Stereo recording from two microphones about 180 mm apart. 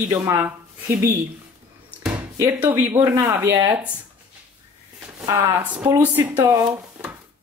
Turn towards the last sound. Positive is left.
turn(degrees=-10)  # may be behind; listen again after turning